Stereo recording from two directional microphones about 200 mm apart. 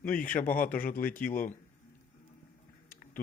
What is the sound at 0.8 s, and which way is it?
Speech, 45° left (ahead or behind).